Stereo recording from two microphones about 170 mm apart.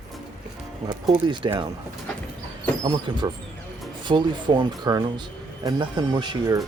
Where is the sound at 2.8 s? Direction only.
25° right (ahead or behind).